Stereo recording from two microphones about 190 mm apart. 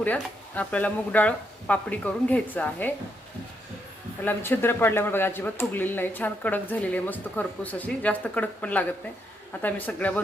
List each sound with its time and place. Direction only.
0.0 s speech: 10° left (ahead or behind)
4.2 s speech: 10° left (ahead or behind)